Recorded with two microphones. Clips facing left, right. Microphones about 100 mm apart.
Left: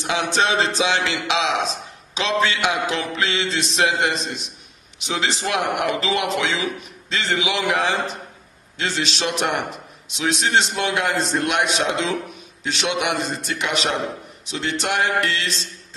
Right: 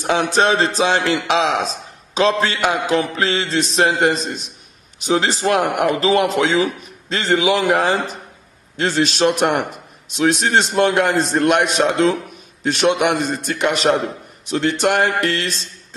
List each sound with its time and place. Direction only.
0.0 s a man's voice: 45° right (ahead or behind)
2.4 s mantra: 40° right (ahead or behind)
8.7 s a man's voice: 45° right (ahead or behind)